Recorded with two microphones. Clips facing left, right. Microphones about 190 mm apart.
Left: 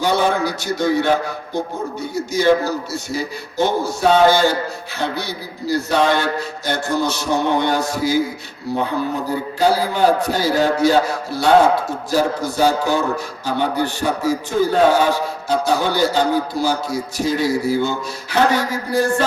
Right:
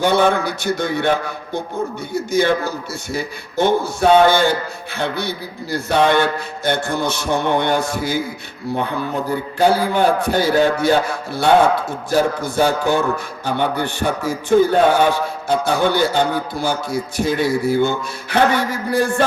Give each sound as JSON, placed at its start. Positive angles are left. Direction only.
{"t": 0.0, "sound": "a man's voice", "side_deg": -55}
{"t": 9.6, "sound": "a man's voice", "side_deg": -55}